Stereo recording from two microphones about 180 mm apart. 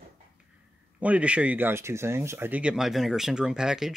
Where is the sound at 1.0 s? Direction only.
5° right (ahead or behind).